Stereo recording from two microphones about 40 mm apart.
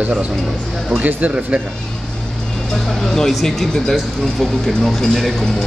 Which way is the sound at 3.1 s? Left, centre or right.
Centre.